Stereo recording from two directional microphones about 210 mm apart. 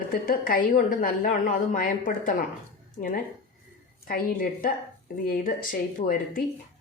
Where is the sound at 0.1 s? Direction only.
45° left (ahead or behind).